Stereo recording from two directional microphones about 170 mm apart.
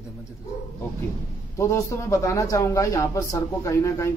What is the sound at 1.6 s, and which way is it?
Speech, 15° left (ahead or behind).